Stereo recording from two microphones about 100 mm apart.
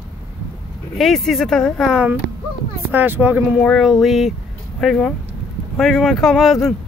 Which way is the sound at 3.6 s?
Centre (ahead or behind).